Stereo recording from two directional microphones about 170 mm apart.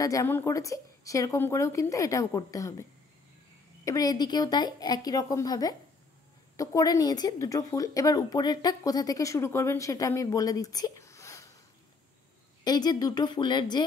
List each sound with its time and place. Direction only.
0.0 s speech: 20° left (ahead or behind)
12.6 s speech: 25° left (ahead or behind)